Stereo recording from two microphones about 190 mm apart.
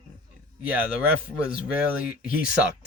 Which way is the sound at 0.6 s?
5° right (ahead or behind).